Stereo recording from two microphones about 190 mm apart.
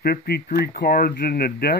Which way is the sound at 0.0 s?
55° left (ahead or behind).